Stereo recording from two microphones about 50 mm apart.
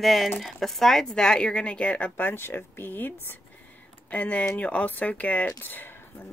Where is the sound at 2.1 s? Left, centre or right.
Left.